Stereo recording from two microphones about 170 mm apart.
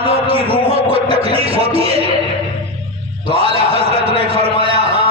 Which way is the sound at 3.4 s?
35° right (ahead or behind).